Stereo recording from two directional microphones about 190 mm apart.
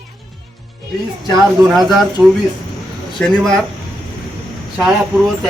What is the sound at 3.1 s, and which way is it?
Speech, centre (ahead or behind).